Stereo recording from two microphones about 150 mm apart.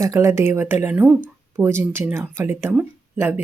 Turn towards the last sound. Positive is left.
turn(degrees=-5)  # may be behind; listen again after turning